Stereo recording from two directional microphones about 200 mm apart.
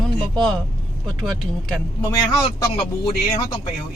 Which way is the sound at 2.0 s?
20° left (ahead or behind).